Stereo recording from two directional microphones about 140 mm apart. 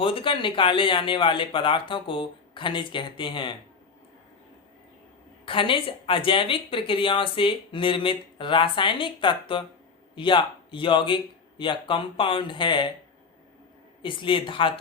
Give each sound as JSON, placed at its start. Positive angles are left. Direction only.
{"t": 0.0, "sound": "speech", "side_deg": 40}
{"t": 5.5, "sound": "speech", "side_deg": 40}
{"t": 14.0, "sound": "speech", "side_deg": 40}